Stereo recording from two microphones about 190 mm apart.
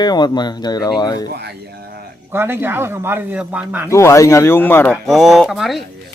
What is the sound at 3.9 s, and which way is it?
Speech, 15° left (ahead or behind).